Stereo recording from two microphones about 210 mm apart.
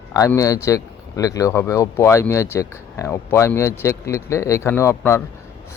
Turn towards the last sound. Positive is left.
turn(degrees=10)  # may be behind; listen again after turning